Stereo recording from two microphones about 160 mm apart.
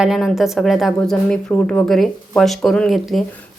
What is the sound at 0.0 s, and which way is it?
Speech, centre (ahead or behind).